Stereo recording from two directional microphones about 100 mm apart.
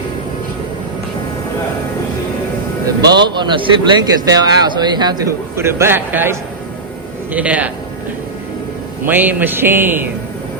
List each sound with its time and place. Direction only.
2.8 s a man's voice: 45° right (ahead or behind)
4.1 s speech: 40° right (ahead or behind)
5.5 s speech: 25° right (ahead or behind)
7.3 s a man's voice: 15° right (ahead or behind)
9.0 s speech: 20° right (ahead or behind)